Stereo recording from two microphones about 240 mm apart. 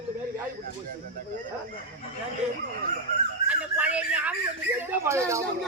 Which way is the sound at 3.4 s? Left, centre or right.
Centre.